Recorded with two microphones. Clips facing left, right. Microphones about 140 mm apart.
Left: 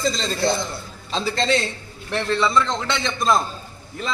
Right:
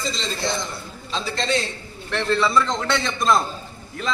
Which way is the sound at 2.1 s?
Centre (ahead or behind).